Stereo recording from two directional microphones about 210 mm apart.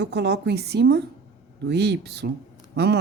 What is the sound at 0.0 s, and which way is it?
Speech, 50° right (ahead or behind).